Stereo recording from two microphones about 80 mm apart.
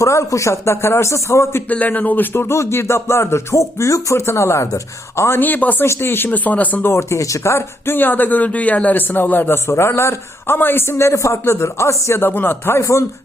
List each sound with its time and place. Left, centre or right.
0.0 s music: left
1.7 s music: centre; by 5.4 s left
5.4 s speech: left
6.9 s speech: left
9.6 s music: left